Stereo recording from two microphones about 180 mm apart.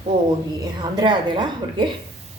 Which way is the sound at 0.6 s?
25° right (ahead or behind).